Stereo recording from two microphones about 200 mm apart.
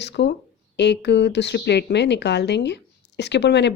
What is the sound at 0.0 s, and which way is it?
Speech, 60° left (ahead or behind).